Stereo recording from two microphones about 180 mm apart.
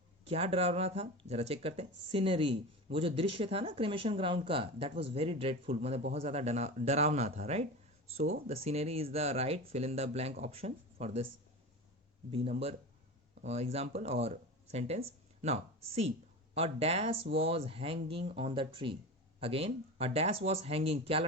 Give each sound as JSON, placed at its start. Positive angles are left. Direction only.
{"t": 0.3, "sound": "speech", "side_deg": -35}
{"t": 12.3, "sound": "speech", "side_deg": -35}